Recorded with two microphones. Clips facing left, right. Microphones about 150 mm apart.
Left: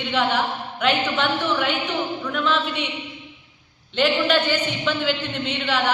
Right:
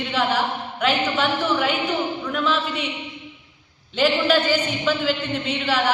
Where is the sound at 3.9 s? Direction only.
5° right (ahead or behind).